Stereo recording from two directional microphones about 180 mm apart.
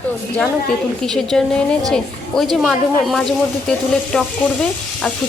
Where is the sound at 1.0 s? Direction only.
Centre (ahead or behind).